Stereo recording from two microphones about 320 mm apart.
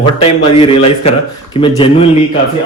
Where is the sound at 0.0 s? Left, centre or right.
Centre.